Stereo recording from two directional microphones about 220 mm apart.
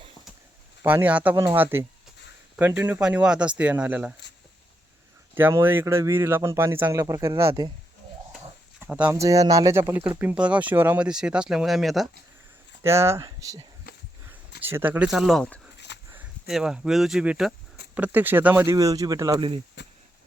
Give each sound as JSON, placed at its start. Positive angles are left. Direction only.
{"t": 0.8, "sound": "speech", "side_deg": -10}
{"t": 5.3, "sound": "speech", "side_deg": -10}
{"t": 8.8, "sound": "speech", "side_deg": -5}
{"t": 12.8, "sound": "speech", "side_deg": -10}
{"t": 16.0, "sound": "speech", "side_deg": -5}
{"t": 19.8, "sound": "a sound", "side_deg": 50}